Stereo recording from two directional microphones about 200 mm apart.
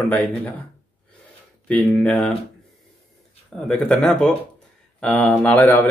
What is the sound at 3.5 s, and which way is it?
Speech, 5° left (ahead or behind).